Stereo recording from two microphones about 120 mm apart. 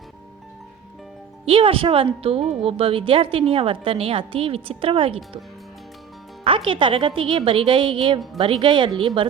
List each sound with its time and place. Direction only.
1.5 s a woman's voice: 45° right (ahead or behind)
6.4 s a woman's voice: 50° right (ahead or behind)